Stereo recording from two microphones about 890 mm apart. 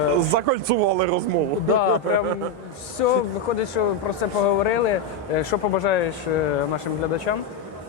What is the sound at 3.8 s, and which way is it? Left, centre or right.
Speech, left.